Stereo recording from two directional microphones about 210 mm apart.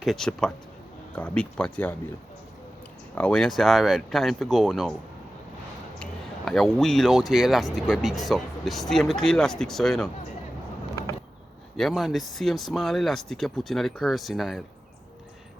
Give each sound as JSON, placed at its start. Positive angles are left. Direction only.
{"t": 0.0, "sound": "speech", "side_deg": 0}
{"t": 3.2, "sound": "speech", "side_deg": 5}
{"t": 6.0, "sound": "speech", "side_deg": 0}
{"t": 11.8, "sound": "speech", "side_deg": 0}